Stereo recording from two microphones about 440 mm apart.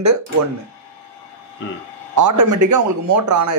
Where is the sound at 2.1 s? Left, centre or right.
Right.